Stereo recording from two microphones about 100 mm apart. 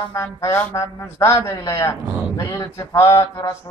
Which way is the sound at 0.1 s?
30° left (ahead or behind).